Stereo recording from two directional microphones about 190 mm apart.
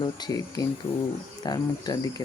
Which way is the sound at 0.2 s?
20° left (ahead or behind).